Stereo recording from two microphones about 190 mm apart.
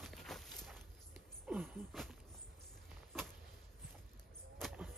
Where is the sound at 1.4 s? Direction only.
5° right (ahead or behind).